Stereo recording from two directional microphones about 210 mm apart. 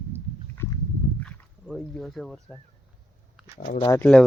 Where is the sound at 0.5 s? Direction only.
15° left (ahead or behind).